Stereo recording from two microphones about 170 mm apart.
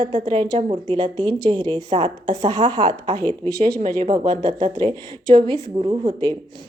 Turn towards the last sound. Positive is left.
turn(degrees=-30)  # may be behind; listen again after turning